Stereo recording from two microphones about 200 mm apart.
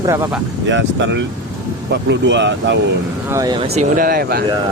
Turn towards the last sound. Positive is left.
turn(degrees=-50)  # may be behind; listen again after turning